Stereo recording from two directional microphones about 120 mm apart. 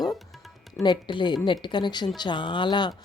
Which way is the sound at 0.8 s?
40° left (ahead or behind).